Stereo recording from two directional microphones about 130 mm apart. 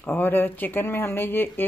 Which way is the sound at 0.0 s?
15° left (ahead or behind).